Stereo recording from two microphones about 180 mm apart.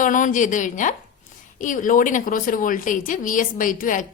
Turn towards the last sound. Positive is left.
turn(degrees=50)  # may be behind; listen again after turning